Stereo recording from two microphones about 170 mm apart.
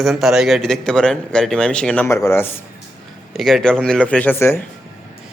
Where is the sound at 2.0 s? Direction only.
15° left (ahead or behind).